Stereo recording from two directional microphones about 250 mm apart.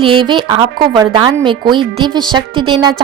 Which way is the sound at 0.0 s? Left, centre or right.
Centre.